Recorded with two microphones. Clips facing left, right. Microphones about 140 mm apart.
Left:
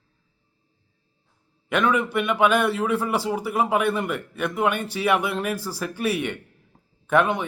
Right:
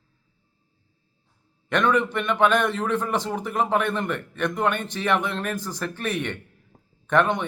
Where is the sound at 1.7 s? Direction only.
5° left (ahead or behind).